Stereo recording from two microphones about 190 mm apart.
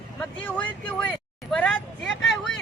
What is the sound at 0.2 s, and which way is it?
Speech, 5° left (ahead or behind).